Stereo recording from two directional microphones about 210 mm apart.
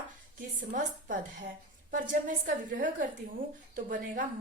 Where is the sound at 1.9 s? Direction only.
40° right (ahead or behind).